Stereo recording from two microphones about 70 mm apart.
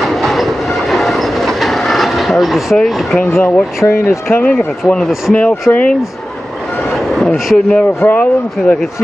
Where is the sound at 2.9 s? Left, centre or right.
Centre.